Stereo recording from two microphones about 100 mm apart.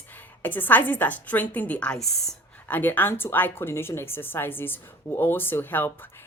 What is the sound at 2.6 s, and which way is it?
Speech, 20° left (ahead or behind).